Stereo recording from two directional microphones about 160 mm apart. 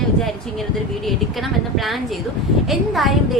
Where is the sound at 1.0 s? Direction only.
Centre (ahead or behind).